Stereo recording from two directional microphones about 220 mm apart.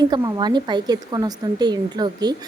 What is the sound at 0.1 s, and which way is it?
A woman's voice, 20° right (ahead or behind).